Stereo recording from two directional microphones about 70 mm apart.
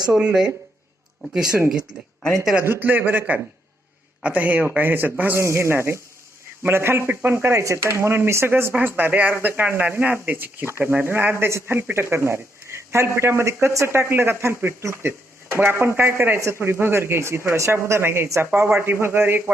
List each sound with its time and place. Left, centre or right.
0.1 s a man's voice: centre
1.2 s speech: centre
2.6 s a man's voice: right
5.4 s speech: right